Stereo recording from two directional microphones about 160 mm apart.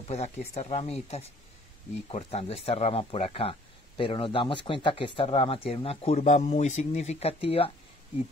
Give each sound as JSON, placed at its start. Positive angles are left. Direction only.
{"t": 0.1, "sound": "speech", "side_deg": 45}